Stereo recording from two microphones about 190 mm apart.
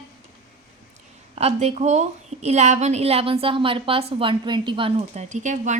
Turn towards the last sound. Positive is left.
turn(degrees=-40)  # may be behind; listen again after turning